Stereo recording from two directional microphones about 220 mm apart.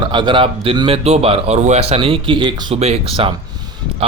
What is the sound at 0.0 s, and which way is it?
A man's voice, 20° right (ahead or behind).